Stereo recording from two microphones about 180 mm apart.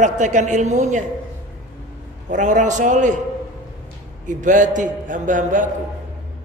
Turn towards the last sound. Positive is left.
turn(degrees=-45)  # may be behind; listen again after turning